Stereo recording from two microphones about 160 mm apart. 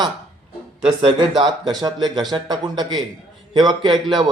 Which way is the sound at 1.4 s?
25° right (ahead or behind).